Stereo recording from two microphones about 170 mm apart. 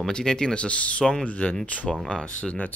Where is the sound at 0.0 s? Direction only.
5° left (ahead or behind).